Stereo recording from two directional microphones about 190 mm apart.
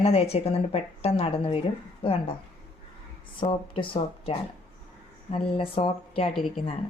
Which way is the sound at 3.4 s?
25° left (ahead or behind).